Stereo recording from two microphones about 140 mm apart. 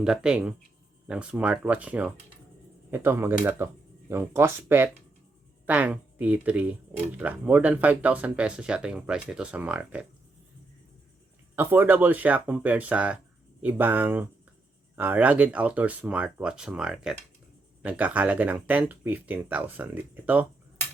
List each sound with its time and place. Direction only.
0.0 s speech: 5° right (ahead or behind)
11.5 s speech: 15° right (ahead or behind)